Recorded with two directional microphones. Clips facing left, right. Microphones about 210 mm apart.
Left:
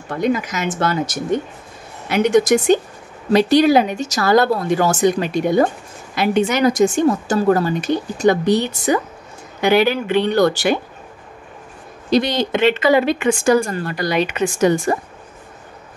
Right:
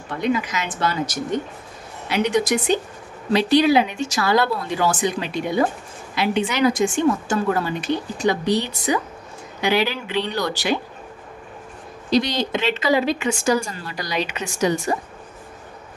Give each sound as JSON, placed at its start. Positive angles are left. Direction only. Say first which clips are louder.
{"t": 0.1, "sound": "a woman's voice", "louder": "left 3 dB", "side_deg": 45}
{"t": 12.1, "sound": "speech", "louder": "left 3 dB", "side_deg": 55}